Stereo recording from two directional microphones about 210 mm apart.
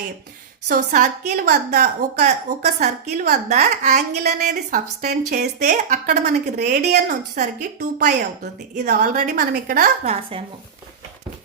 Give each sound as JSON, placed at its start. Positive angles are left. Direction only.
{"t": 0.7, "sound": "speech", "side_deg": -35}
{"t": 1.3, "sound": "speech", "side_deg": -50}